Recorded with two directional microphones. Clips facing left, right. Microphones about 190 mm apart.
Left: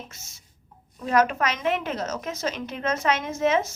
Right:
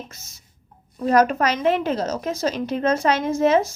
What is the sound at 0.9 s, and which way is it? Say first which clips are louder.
A woman's voice: right 4 dB; 40° right (ahead or behind).